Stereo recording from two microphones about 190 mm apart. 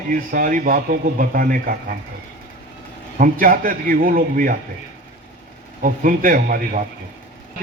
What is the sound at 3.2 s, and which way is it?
A man's voice, 50° right (ahead or behind).